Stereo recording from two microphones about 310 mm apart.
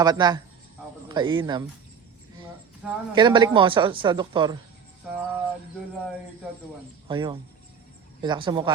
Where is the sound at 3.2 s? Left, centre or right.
Centre.